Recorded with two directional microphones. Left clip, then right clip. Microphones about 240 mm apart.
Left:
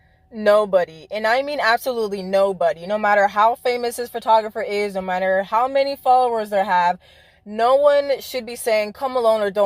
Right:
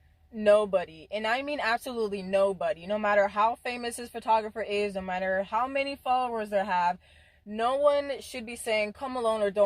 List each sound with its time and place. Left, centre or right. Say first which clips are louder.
0.3 s speech: left 7 dB; left